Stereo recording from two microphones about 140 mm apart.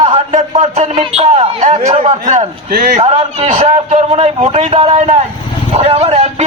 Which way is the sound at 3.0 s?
45° right (ahead or behind).